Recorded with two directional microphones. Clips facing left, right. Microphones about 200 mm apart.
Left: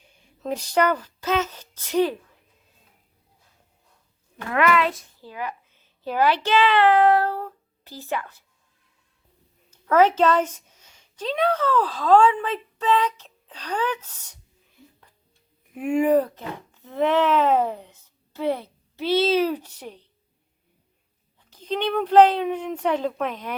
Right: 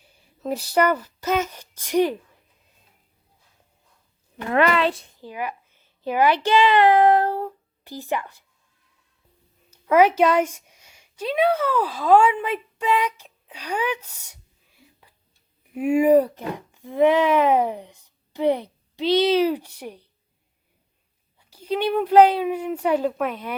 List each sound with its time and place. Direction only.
0.4 s speech: 10° right (ahead or behind)
4.5 s a child's voice: 30° right (ahead or behind)
5.2 s a child's voice: 15° right (ahead or behind)
9.8 s speech: 10° right (ahead or behind)
15.7 s speech: 10° right (ahead or behind)
21.3 s speech: 10° right (ahead or behind)